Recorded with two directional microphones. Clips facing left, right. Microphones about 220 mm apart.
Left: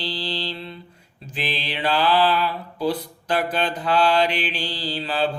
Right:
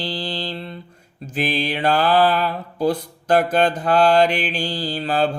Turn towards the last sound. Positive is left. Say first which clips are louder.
# right 4 dB
turn(degrees=-45)  # may be behind; listen again after turning